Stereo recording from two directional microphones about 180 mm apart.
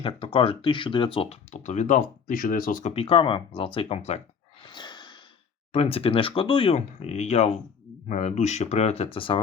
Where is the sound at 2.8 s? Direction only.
30° left (ahead or behind).